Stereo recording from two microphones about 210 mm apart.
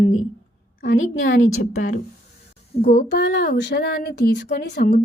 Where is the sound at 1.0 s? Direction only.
40° left (ahead or behind).